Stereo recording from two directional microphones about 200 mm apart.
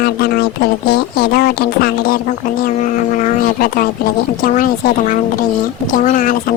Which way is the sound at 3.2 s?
45° left (ahead or behind).